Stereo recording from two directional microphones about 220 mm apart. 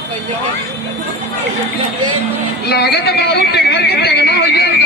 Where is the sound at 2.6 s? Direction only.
45° left (ahead or behind).